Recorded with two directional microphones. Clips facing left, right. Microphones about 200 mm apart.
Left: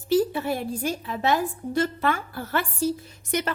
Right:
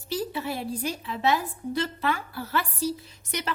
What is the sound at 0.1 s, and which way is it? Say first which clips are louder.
A woman's voice: left 8 dB; 50° left (ahead or behind).